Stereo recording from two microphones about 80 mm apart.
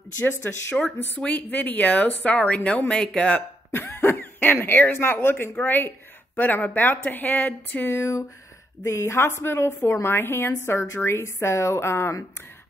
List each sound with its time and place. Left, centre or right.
0.2 s speech: left; by 3.4 s centre
3.7 s speech: left
8.0 s a woman's voice: left